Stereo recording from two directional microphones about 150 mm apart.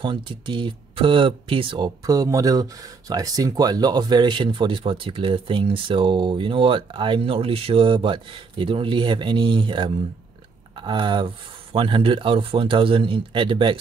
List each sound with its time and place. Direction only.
0.0 s speech: 35° right (ahead or behind)